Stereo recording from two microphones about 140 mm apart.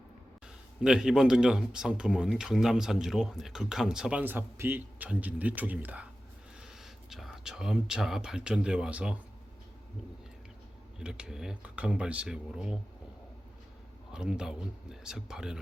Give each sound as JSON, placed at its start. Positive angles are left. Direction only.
{"t": 0.8, "sound": "speech", "side_deg": -5}
{"t": 11.0, "sound": "speech", "side_deg": -5}
{"t": 14.1, "sound": "speech", "side_deg": -5}